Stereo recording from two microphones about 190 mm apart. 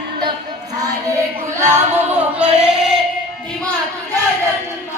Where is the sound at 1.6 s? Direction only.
10° right (ahead or behind).